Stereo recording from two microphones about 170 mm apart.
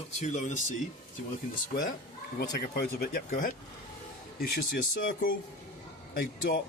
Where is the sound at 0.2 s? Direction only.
45° left (ahead or behind).